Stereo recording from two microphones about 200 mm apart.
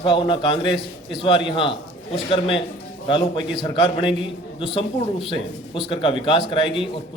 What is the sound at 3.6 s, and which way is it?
A man's voice, 25° left (ahead or behind).